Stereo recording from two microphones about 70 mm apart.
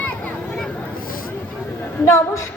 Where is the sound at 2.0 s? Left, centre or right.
Left.